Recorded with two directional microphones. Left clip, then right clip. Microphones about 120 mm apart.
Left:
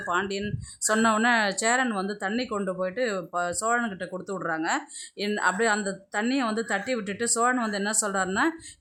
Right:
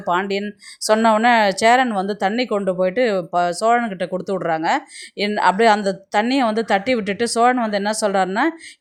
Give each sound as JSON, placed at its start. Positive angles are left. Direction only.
{"t": 0.0, "sound": "speech", "side_deg": -35}